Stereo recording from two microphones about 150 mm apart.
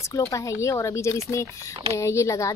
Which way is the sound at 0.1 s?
20° left (ahead or behind).